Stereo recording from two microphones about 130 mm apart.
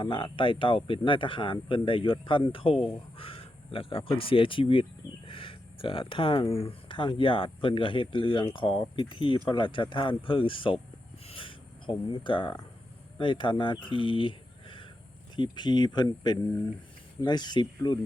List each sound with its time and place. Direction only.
0.0 s speech: 40° left (ahead or behind)
11.3 s writing: 40° left (ahead or behind)
13.1 s speech: 40° left (ahead or behind)